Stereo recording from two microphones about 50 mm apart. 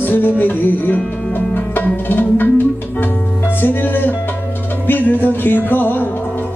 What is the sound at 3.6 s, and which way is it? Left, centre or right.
Music, left.